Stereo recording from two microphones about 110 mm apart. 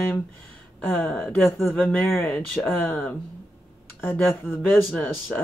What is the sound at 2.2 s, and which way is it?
Speech, 5° left (ahead or behind).